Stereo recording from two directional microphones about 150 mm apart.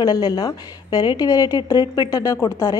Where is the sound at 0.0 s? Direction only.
25° left (ahead or behind).